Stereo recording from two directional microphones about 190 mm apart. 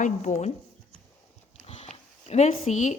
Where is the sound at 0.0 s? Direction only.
40° left (ahead or behind).